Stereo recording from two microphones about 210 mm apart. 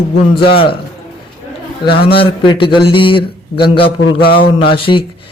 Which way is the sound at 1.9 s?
50° left (ahead or behind).